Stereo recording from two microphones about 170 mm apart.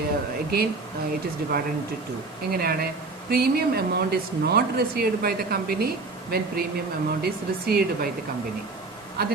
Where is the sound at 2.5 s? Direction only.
65° right (ahead or behind).